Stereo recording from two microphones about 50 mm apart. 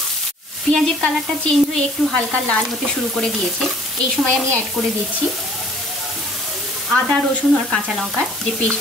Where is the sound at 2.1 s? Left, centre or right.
Left.